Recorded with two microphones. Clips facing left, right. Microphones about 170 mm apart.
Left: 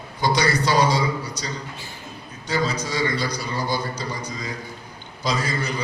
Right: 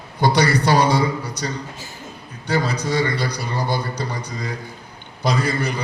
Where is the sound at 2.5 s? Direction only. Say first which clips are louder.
Right 3 dB; 60° right (ahead or behind).